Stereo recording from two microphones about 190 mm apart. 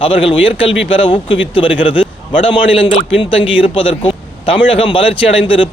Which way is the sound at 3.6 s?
25° left (ahead or behind).